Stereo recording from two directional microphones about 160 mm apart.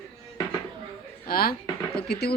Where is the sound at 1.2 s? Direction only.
70° left (ahead or behind).